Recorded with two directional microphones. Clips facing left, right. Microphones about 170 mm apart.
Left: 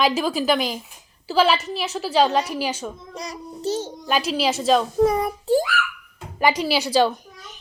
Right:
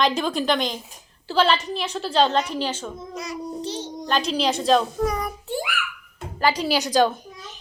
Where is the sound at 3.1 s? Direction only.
40° left (ahead or behind).